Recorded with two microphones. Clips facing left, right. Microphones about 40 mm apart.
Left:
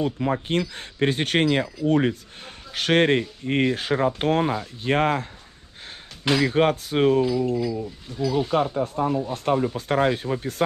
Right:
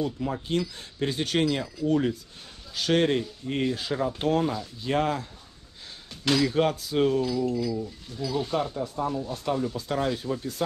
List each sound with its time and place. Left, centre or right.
0.0 s speech: left
6.2 s speech: left
6.5 s speech: left
7.2 s speech: left
8.7 s speech: left